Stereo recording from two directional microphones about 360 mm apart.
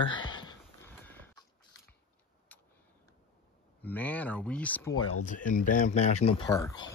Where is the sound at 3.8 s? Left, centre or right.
Centre.